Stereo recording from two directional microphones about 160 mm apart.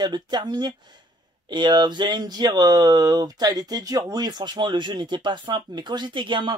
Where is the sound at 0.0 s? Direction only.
25° right (ahead or behind).